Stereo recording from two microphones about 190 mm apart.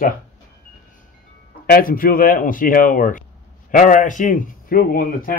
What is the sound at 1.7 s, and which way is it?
A man's voice, 50° left (ahead or behind).